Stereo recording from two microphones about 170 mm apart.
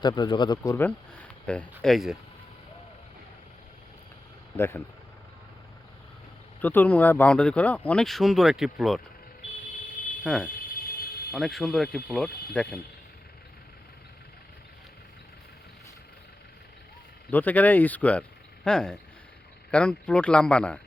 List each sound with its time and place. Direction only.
0.0 s speech: 25° left (ahead or behind)
0.9 s speech: 10° left (ahead or behind)
4.5 s speech: 15° left (ahead or behind)
6.6 s speech: 10° left (ahead or behind)
10.2 s speech: centre (ahead or behind)
10.5 s a sound: 60° left (ahead or behind)
11.3 s speech: centre (ahead or behind)
17.3 s speech: 10° left (ahead or behind)